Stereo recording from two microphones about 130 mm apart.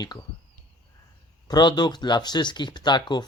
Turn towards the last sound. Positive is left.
turn(degrees=35)  # may be behind; listen again after turning